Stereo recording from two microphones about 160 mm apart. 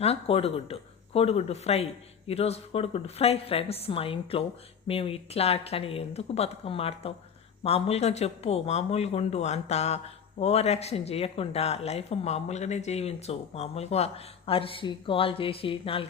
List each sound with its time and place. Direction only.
0.0 s speech: 40° left (ahead or behind)